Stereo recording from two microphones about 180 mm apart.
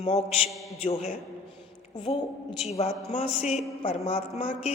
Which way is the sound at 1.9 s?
25° left (ahead or behind).